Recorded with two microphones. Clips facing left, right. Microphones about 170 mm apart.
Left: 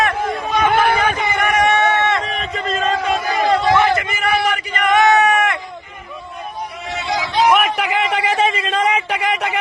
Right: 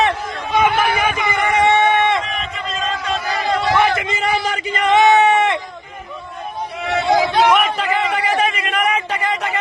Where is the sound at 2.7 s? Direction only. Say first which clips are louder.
Left 5 dB; 50° left (ahead or behind).